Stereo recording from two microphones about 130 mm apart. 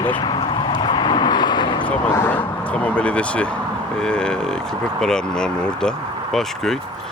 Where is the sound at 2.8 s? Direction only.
10° left (ahead or behind).